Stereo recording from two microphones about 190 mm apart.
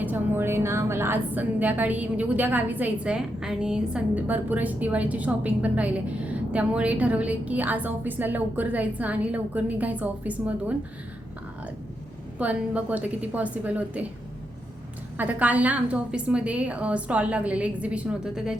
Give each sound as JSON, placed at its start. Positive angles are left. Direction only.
{"t": 0.0, "sound": "a woman's voice", "side_deg": -10}
{"t": 12.4, "sound": "a woman's voice", "side_deg": -5}
{"t": 15.2, "sound": "a woman's voice", "side_deg": -10}